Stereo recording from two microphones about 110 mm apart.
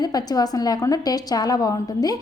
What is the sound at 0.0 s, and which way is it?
A woman's voice, 35° left (ahead or behind).